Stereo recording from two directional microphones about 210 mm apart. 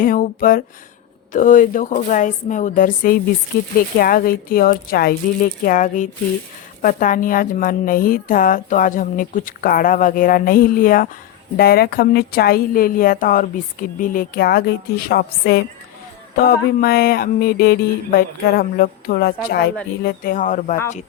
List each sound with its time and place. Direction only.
0.0 s a woman's voice: 40° left (ahead or behind)
16.8 s a woman's voice: 45° left (ahead or behind)